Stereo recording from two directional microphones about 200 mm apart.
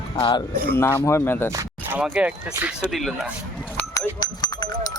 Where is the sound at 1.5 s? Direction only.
10° right (ahead or behind).